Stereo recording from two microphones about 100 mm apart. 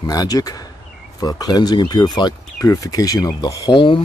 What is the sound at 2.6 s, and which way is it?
Speech, 35° left (ahead or behind).